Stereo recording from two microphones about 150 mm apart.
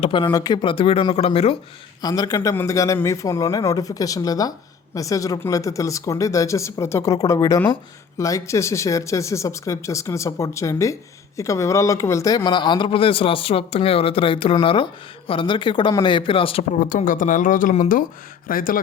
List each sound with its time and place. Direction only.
0.0 s a man's voice: 35° left (ahead or behind)
2.0 s a man's voice: 25° left (ahead or behind)
16.8 s a man's voice: 65° left (ahead or behind)